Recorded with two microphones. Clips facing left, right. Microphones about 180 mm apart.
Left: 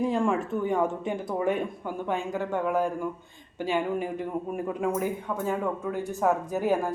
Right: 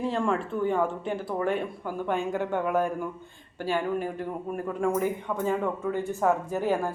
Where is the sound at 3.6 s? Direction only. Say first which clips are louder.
Even; 15° left (ahead or behind).